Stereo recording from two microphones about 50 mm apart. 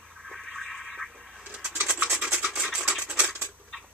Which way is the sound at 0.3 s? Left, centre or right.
Centre.